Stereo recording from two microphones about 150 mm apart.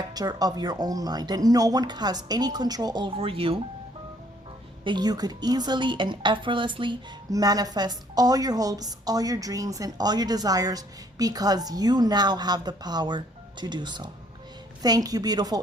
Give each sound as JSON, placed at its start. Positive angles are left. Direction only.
{"t": 0.1, "sound": "a woman's voice", "side_deg": -25}
{"t": 4.8, "sound": "a woman's voice", "side_deg": -30}